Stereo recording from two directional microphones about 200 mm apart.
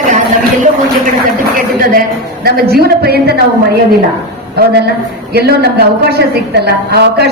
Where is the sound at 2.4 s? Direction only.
50° right (ahead or behind).